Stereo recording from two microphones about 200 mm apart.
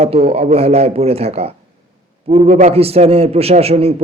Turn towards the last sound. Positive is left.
turn(degrees=-30)  # may be behind; listen again after turning